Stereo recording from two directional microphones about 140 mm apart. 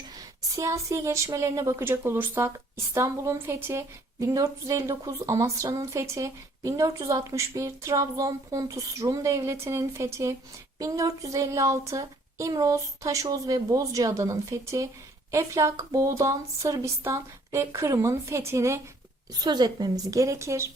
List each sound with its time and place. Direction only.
0.4 s a woman's voice: 25° right (ahead or behind)